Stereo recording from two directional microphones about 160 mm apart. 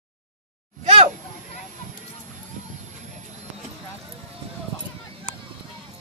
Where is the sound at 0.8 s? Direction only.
40° right (ahead or behind).